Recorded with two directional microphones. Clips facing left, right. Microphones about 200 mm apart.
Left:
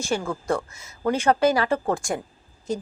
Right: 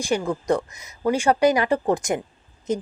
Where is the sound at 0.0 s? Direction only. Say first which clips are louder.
Right 3 dB; 15° right (ahead or behind).